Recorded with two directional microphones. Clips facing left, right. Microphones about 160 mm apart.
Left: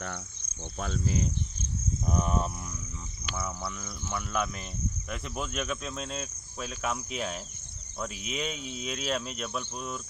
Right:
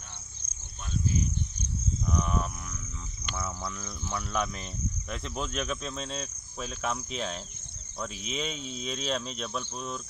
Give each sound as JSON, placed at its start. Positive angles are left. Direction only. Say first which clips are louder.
{"t": 0.7, "sound": "speech", "louder": "left 1 dB", "side_deg": 90}
{"t": 2.0, "sound": "wild animals", "louder": "left 2 dB", "side_deg": 45}
{"t": 3.3, "sound": "speech", "louder": "even", "side_deg": 5}
{"t": 5.1, "sound": "cricket", "louder": "right 1 dB", "side_deg": 5}